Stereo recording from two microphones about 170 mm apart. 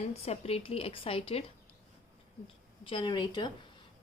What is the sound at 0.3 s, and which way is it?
A woman's voice, 35° left (ahead or behind).